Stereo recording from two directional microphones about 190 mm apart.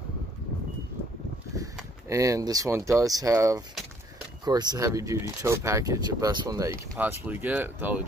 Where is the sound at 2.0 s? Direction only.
15° right (ahead or behind).